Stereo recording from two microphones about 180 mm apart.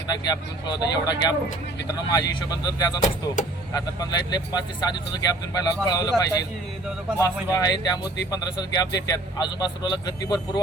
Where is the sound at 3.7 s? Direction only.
20° left (ahead or behind).